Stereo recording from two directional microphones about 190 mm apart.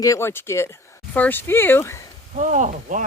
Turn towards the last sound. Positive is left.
turn(degrees=-40)  # may be behind; listen again after turning